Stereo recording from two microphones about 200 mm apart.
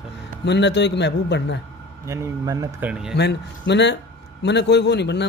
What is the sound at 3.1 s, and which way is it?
A man's voice, 60° left (ahead or behind).